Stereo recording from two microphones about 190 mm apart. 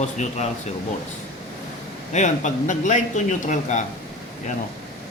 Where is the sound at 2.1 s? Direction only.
40° left (ahead or behind).